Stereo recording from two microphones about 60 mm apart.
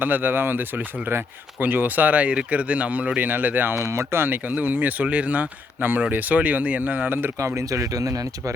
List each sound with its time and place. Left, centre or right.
0.0 s speech: right
1.5 s speech: right
3.8 s speech: right
7.3 s speech: right